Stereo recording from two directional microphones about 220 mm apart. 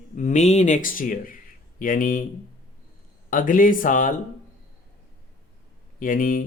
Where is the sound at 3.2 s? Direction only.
35° left (ahead or behind).